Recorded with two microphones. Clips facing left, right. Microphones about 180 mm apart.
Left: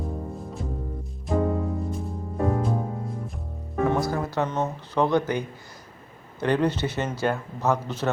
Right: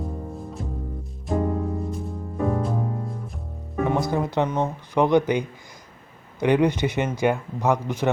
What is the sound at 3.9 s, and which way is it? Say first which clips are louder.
A man's voice: right 5 dB; 20° right (ahead or behind).